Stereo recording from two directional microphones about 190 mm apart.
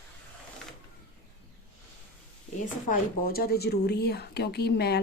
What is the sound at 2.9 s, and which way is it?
A woman's voice, 50° left (ahead or behind).